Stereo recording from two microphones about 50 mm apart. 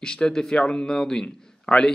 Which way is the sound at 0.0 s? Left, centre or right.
Centre.